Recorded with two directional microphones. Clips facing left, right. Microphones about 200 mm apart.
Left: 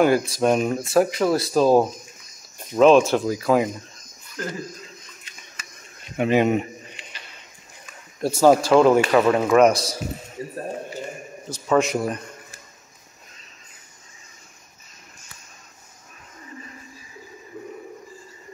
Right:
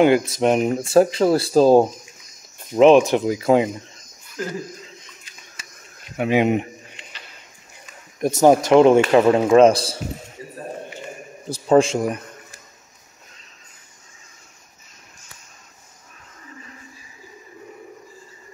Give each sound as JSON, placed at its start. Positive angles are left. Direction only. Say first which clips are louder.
{"t": 0.0, "sound": "speech", "louder": "right 2 dB", "side_deg": -20}
{"t": 2.7, "sound": "speech", "louder": "right 2 dB", "side_deg": -15}
{"t": 6.1, "sound": "speech", "louder": "right 1 dB", "side_deg": -10}
{"t": 8.2, "sound": "speech", "louder": "right 1 dB", "side_deg": -20}
{"t": 10.4, "sound": "a sound", "louder": "left 5 dB", "side_deg": 30}
{"t": 11.5, "sound": "a man's voice", "louder": "right 5 dB", "side_deg": -30}